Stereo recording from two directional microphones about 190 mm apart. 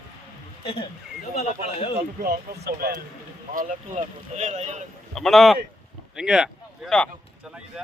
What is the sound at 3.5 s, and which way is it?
Speech, 45° right (ahead or behind).